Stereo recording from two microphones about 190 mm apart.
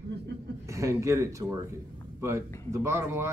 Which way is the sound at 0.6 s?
15° right (ahead or behind).